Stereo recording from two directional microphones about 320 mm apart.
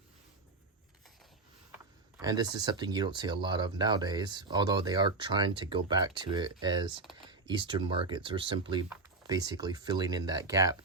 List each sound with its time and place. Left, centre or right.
2.1 s speech: centre